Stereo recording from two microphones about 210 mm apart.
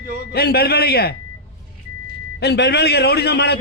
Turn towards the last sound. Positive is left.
turn(degrees=50)  # may be behind; listen again after turning